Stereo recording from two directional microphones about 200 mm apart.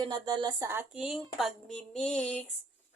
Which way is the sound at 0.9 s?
Centre (ahead or behind).